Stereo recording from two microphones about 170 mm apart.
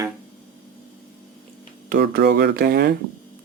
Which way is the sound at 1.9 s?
65° right (ahead or behind).